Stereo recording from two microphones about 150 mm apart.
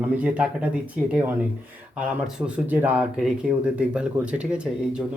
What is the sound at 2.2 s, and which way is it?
Speech, 10° right (ahead or behind).